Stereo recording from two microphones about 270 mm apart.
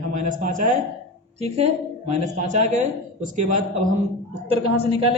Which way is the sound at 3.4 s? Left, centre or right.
Right.